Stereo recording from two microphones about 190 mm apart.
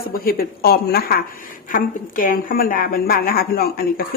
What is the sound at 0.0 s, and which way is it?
A woman's voice, 50° left (ahead or behind).